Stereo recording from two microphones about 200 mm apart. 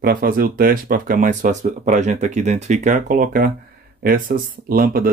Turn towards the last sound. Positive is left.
turn(degrees=-45)  # may be behind; listen again after turning